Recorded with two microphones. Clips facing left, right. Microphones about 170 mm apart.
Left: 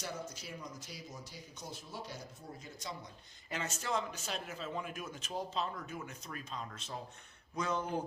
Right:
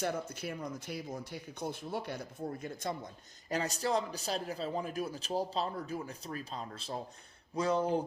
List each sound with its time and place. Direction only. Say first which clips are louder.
0.0 s speech: right 8 dB; 55° right (ahead or behind)
3.5 s a man's voice: right 5 dB; 35° right (ahead or behind)